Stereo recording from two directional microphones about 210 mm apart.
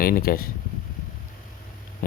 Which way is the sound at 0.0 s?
45° left (ahead or behind).